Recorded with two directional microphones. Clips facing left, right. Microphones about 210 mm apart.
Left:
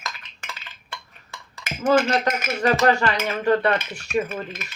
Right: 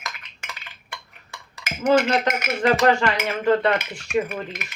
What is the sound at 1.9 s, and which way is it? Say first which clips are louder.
Speech: even; 20° right (ahead or behind).